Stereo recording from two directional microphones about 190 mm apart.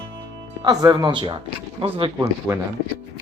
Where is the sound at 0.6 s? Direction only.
20° right (ahead or behind).